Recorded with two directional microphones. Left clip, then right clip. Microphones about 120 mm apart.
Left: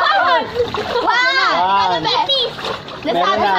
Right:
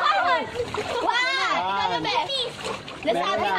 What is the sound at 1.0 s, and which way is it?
Splash, 35° right (ahead or behind).